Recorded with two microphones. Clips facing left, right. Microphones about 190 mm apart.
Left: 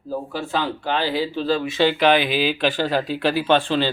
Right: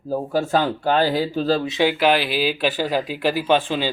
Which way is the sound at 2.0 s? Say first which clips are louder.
Left 1 dB; 5° right (ahead or behind).